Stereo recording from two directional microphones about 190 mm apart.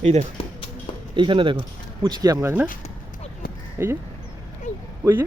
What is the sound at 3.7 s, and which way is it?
Speech, 15° right (ahead or behind).